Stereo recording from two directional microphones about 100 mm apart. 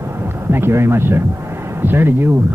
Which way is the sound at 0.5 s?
25° right (ahead or behind).